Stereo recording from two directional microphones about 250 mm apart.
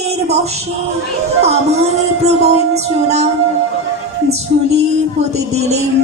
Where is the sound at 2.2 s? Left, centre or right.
Right.